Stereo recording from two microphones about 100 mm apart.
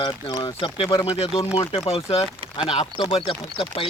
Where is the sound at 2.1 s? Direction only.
60° left (ahead or behind).